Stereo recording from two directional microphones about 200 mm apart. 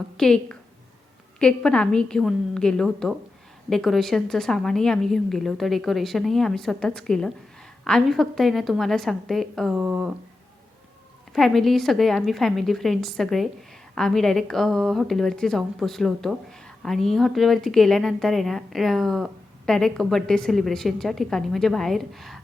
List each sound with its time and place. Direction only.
0.2 s a woman's voice: 5° left (ahead or behind)
11.3 s a woman's voice: centre (ahead or behind)